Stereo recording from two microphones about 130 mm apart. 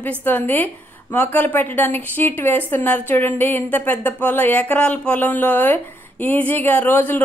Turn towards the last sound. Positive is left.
turn(degrees=15)  # may be behind; listen again after turning